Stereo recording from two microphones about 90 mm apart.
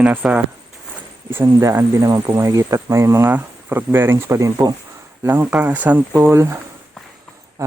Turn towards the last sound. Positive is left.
turn(degrees=-30)  # may be behind; listen again after turning